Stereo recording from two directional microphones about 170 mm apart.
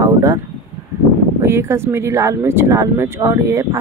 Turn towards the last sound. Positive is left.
turn(degrees=-15)  # may be behind; listen again after turning